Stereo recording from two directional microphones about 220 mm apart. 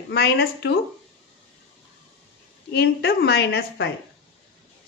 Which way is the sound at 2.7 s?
45° left (ahead or behind).